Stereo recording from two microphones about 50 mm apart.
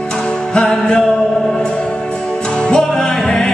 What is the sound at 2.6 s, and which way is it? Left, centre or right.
Music, centre.